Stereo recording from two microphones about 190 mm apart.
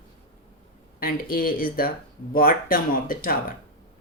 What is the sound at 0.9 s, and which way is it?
Speech, 50° left (ahead or behind).